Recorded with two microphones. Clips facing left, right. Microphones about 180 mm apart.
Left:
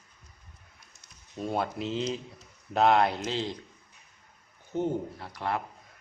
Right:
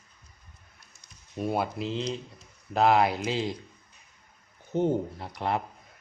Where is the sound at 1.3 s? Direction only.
10° right (ahead or behind).